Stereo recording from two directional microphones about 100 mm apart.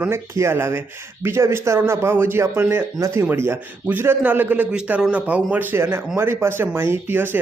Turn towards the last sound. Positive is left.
turn(degrees=-20)  # may be behind; listen again after turning